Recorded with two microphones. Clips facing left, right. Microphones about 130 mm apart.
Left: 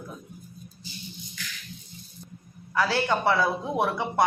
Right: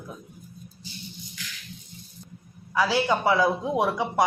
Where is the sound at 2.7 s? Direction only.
10° right (ahead or behind).